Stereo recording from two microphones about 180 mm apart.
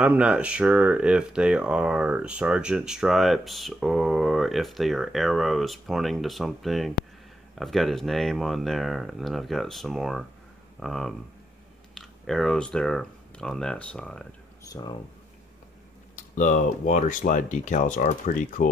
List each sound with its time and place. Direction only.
0.0 s speech: 5° right (ahead or behind)
14.7 s speech: 25° left (ahead or behind)
16.2 s speech: 45° left (ahead or behind)